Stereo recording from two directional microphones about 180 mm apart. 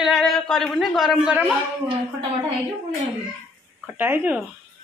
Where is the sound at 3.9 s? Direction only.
10° right (ahead or behind).